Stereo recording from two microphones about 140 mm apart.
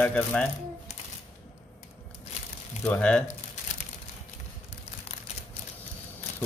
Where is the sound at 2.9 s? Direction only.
10° left (ahead or behind).